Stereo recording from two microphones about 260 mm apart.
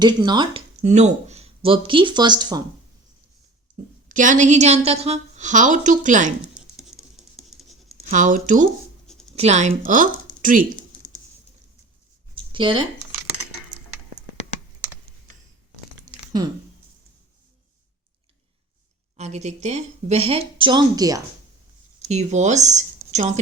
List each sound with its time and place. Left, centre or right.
0.0 s speech: centre
4.1 s a woman's voice: right
6.7 s patter: centre
8.1 s a woman's voice: right
9.0 s writing: centre
9.3 s a woman's voice: right
12.3 s a sound: centre
19.1 s a woman's voice: right
22.0 s speech: right